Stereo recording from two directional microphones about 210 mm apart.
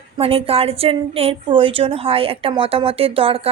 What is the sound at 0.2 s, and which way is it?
A woman's voice, 25° right (ahead or behind).